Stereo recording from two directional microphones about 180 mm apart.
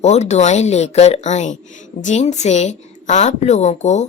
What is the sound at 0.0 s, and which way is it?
A woman's voice, 40° left (ahead or behind).